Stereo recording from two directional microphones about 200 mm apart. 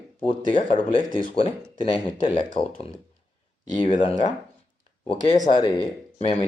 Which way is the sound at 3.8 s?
35° left (ahead or behind).